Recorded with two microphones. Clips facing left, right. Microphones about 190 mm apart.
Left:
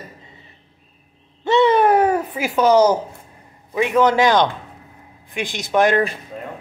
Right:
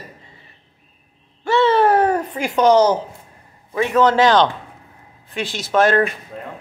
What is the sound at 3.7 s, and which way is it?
A man's voice, 10° left (ahead or behind).